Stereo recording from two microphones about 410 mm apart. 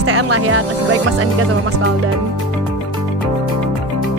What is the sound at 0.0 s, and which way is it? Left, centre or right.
Speech, right.